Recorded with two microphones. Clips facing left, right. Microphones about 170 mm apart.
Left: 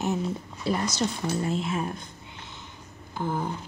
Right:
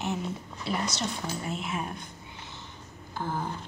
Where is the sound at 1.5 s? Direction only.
30° left (ahead or behind).